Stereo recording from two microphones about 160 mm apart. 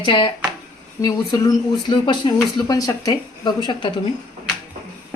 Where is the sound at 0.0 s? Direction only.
30° left (ahead or behind).